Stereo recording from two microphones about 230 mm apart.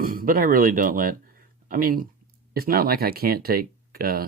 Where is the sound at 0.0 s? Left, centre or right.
Right.